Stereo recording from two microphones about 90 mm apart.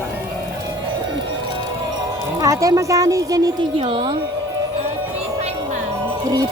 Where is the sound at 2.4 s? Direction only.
40° right (ahead or behind).